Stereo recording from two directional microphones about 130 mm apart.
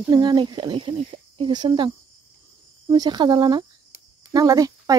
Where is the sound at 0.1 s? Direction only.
35° right (ahead or behind).